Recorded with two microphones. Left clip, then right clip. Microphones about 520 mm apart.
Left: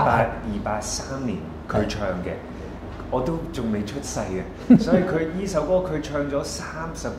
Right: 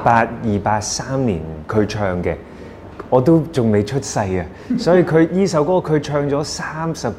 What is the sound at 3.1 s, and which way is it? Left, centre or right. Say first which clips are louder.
Speech: right 12 dB; right.